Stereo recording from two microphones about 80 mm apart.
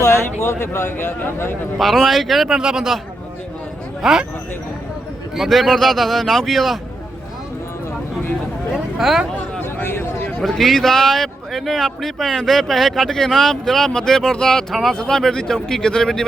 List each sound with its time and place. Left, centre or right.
0.4 s a man's voice: left
1.8 s speech: centre
4.0 s speech: centre
5.4 s speech: centre
9.0 s speech: centre
9.3 s a sound: left
10.4 s speech: centre